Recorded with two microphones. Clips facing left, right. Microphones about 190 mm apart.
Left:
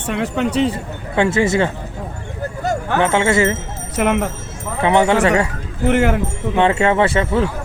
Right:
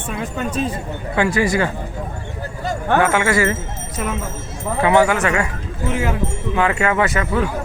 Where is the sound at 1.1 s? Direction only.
25° left (ahead or behind).